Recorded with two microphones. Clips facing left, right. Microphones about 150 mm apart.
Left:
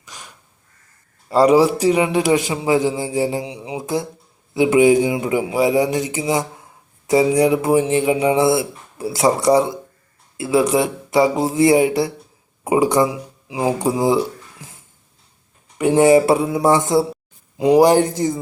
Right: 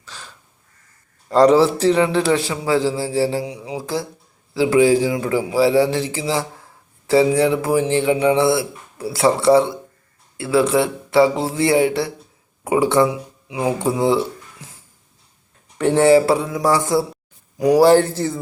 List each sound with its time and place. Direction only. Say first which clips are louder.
0.0 s crow: right 1 dB; 15° left (ahead or behind)
1.3 s a man's voice: even; 10° left (ahead or behind)
10.4 s speech: even; 20° left (ahead or behind)
15.8 s a man's voice: left 1 dB; 10° left (ahead or behind)